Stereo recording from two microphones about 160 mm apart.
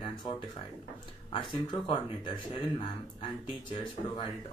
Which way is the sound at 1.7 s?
30° left (ahead or behind).